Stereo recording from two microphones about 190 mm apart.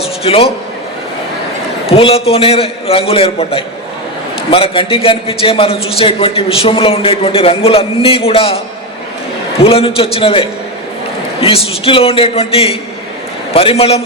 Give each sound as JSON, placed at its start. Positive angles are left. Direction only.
{"t": 0.2, "sound": "a man's voice", "side_deg": 30}
{"t": 1.9, "sound": "a man's voice", "side_deg": 30}
{"t": 9.6, "sound": "a man's voice", "side_deg": 30}